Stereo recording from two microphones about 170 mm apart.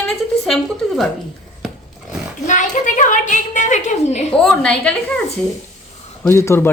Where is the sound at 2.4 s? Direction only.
45° left (ahead or behind).